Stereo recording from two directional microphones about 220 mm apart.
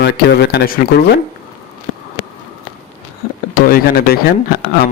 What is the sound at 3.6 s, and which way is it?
A man's voice, 40° left (ahead or behind).